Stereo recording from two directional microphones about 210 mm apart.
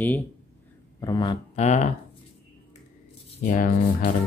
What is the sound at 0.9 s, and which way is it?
Speech, 20° left (ahead or behind).